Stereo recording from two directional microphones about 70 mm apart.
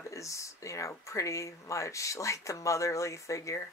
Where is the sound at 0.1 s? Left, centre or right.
Left.